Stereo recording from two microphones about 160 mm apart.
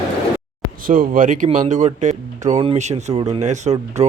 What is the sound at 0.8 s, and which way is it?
Speech, 60° right (ahead or behind).